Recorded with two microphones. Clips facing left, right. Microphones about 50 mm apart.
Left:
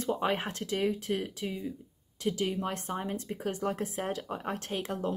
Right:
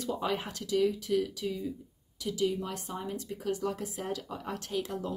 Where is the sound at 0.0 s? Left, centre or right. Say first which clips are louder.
Left 2 dB; left.